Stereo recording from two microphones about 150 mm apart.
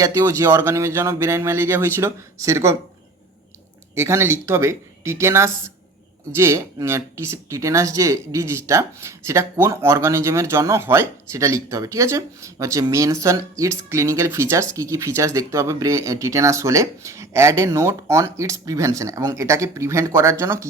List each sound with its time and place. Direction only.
0.0 s speech: 20° right (ahead or behind)
3.9 s speech: 15° right (ahead or behind)